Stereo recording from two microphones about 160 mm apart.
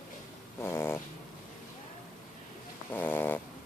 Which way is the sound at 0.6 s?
15° left (ahead or behind).